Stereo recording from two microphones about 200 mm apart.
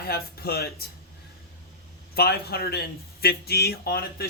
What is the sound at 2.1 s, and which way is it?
Speech, 50° left (ahead or behind).